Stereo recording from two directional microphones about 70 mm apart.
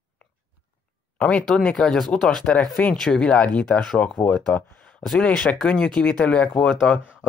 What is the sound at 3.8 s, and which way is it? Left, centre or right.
Speech, centre.